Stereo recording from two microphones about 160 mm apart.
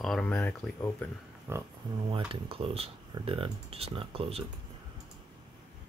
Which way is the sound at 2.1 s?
35° right (ahead or behind).